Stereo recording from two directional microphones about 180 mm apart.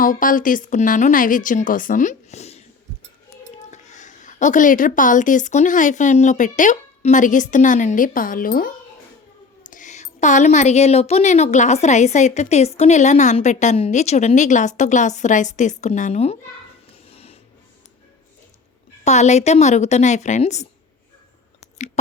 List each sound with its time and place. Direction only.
0.0 s a woman's voice: 50° left (ahead or behind)
3.7 s a woman's voice: 40° left (ahead or behind)
17.1 s music: 35° left (ahead or behind)
19.0 s a woman's voice: 40° left (ahead or behind)